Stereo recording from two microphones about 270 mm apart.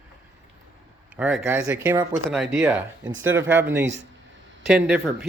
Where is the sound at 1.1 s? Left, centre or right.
Centre.